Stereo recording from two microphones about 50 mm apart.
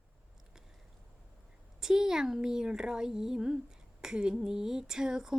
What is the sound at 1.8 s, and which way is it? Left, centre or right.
Speech, centre.